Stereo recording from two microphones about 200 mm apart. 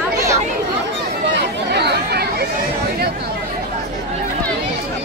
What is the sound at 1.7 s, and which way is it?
Chatter, 55° right (ahead or behind).